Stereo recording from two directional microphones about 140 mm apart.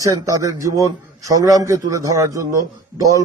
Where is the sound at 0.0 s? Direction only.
25° right (ahead or behind).